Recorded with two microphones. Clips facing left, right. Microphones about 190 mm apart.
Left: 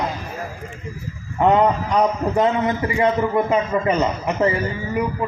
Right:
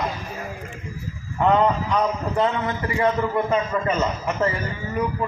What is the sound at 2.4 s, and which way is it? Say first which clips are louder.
A man's voice: left 4 dB; 15° left (ahead or behind).